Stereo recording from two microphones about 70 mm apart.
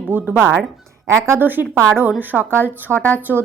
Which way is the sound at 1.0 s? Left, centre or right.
Right.